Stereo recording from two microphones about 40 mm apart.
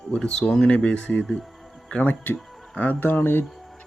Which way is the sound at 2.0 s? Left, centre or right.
Left.